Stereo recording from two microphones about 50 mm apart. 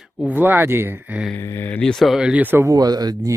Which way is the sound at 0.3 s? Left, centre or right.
Right.